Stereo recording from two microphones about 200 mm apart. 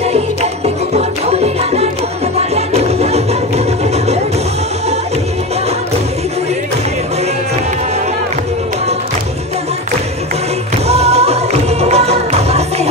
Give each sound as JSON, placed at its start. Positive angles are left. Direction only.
{"t": 0.0, "sound": "music", "side_deg": -30}
{"t": 10.9, "sound": "music", "side_deg": -30}